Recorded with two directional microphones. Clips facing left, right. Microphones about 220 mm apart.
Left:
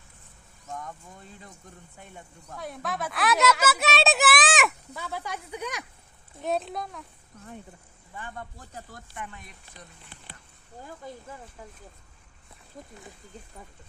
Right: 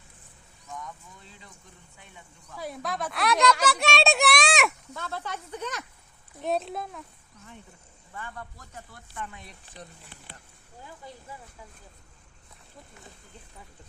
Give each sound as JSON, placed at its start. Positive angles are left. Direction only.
{"t": 0.7, "sound": "speech", "side_deg": 50}
{"t": 2.6, "sound": "speech", "side_deg": 0}
{"t": 4.9, "sound": "speech", "side_deg": 10}
{"t": 6.4, "sound": "speech", "side_deg": 0}
{"t": 8.1, "sound": "a man's voice", "side_deg": 20}
{"t": 10.8, "sound": "speech", "side_deg": 50}